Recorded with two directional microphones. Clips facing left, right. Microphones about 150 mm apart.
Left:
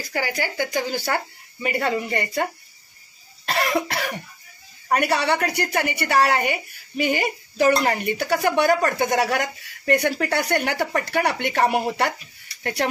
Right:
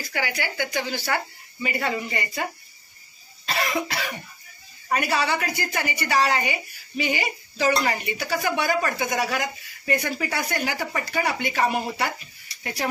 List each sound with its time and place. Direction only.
0.1 s speech: 40° left (ahead or behind); by 2.4 s 55° left (ahead or behind)
3.4 s cough: 60° left (ahead or behind)
4.8 s a woman's voice: 65° left (ahead or behind)